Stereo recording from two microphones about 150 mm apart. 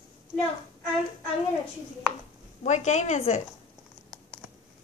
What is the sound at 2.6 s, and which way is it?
Speech, 50° left (ahead or behind).